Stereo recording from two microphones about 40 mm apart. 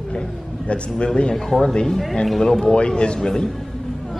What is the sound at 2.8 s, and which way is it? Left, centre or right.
Speech, left.